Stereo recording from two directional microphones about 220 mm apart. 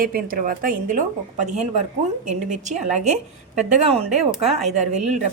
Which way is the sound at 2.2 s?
30° right (ahead or behind).